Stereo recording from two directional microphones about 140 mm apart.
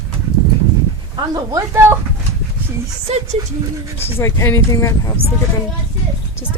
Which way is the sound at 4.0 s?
20° left (ahead or behind).